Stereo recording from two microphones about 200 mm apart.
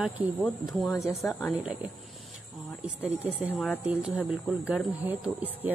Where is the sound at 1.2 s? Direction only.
Centre (ahead or behind).